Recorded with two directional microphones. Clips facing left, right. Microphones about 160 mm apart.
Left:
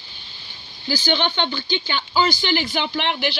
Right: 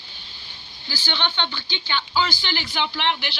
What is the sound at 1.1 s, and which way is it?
Speech, 45° left (ahead or behind).